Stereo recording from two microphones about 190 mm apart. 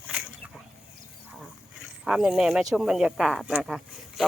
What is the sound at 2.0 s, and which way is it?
Speech, 5° right (ahead or behind).